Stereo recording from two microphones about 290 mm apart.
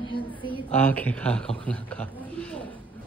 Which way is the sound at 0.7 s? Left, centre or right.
Centre.